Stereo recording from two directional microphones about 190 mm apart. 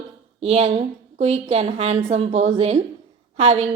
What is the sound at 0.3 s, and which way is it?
A woman's voice, 35° right (ahead or behind).